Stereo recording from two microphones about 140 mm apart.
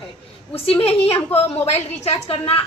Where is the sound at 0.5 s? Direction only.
45° left (ahead or behind).